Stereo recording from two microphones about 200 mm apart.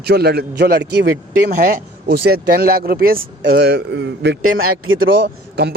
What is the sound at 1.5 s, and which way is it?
Speech, 50° right (ahead or behind).